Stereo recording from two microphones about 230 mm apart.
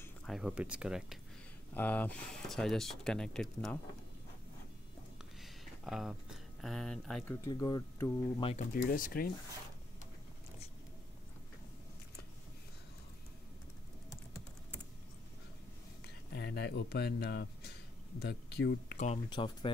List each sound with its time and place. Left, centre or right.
0.0 s speech: centre
5.4 s a sound: centre
7.4 s speech: centre
8.8 s speech: left
16.0 s speech: left
19.2 s speech: left